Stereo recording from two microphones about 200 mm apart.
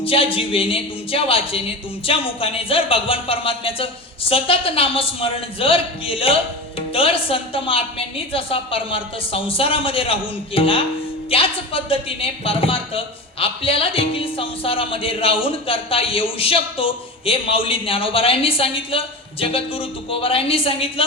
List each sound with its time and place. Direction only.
0.0 s speech: 25° left (ahead or behind)